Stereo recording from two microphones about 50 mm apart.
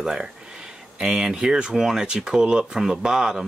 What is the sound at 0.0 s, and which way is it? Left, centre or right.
Speech, centre.